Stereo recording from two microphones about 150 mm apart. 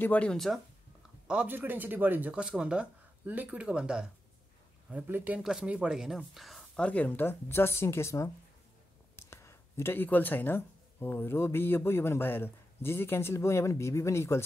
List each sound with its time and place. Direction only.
0.0 s speech: 10° left (ahead or behind)
1.2 s speech: 5° right (ahead or behind); by 14.4 s 15° left (ahead or behind)